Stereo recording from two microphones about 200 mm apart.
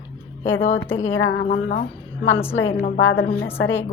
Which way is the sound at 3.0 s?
60° left (ahead or behind).